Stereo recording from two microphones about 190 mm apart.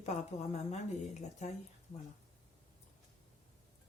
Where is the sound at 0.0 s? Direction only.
35° left (ahead or behind).